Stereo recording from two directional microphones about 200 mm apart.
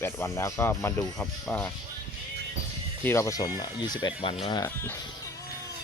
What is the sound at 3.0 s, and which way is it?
Speech, 10° left (ahead or behind).